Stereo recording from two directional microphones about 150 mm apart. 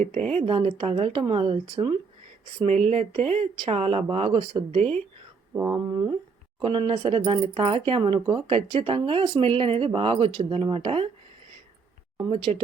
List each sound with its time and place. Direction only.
0.0 s speech: 45° right (ahead or behind)
2.6 s speech: 45° right (ahead or behind)
5.5 s speech: 20° right (ahead or behind); by 11.1 s 40° right (ahead or behind)
12.2 s speech: centre (ahead or behind)